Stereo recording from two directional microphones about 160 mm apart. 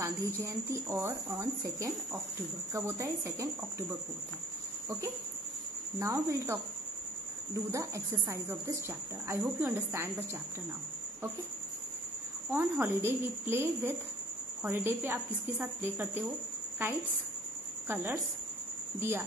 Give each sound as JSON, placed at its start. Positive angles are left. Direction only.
{"t": 0.0, "sound": "speech", "side_deg": -20}
{"t": 5.9, "sound": "speech", "side_deg": -20}
{"t": 12.4, "sound": "speech", "side_deg": -15}
{"t": 17.8, "sound": "speech", "side_deg": -15}